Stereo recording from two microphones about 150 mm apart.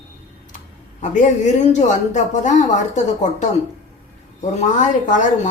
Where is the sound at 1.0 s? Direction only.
55° left (ahead or behind).